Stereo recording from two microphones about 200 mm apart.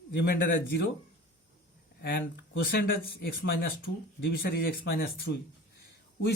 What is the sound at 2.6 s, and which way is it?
Speech, 50° left (ahead or behind).